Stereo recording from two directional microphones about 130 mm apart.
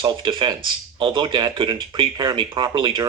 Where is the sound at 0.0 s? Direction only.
40° right (ahead or behind).